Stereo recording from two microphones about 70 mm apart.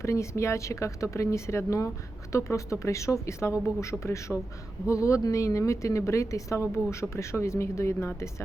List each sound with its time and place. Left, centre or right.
0.0 s a woman's voice: left